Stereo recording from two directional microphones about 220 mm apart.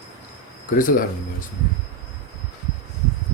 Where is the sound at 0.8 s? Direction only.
40° left (ahead or behind).